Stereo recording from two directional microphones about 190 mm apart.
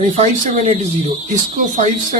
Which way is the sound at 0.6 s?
35° right (ahead or behind).